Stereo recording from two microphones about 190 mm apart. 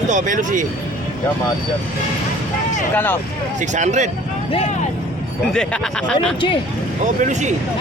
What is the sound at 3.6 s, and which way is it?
Speech, 40° right (ahead or behind).